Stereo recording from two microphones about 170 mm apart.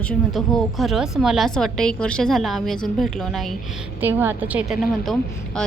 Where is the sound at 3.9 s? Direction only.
10° right (ahead or behind); by 5.7 s 5° left (ahead or behind).